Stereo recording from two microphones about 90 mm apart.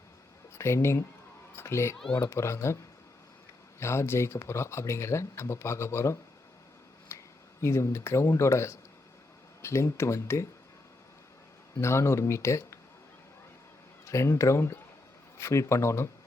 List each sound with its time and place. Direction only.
0.6 s speech: 30° left (ahead or behind)
3.8 s speech: 30° left (ahead or behind)
7.1 s finger snapping: 30° left (ahead or behind)
7.6 s speech: 30° left (ahead or behind)
11.8 s speech: 30° left (ahead or behind)
14.0 s speech: 35° left (ahead or behind)